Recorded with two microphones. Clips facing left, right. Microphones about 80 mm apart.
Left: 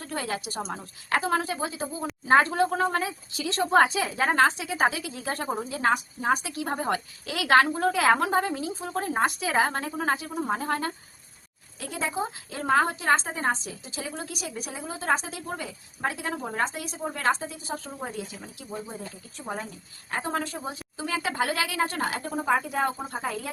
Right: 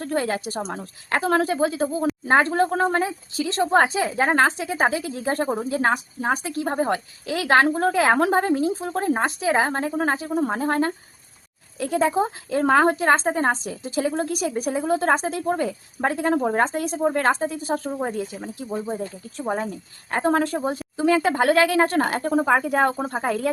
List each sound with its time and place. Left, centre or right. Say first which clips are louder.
0.0 s speech: right 7 dB; right
2.3 s a woman's voice: right 1 dB; right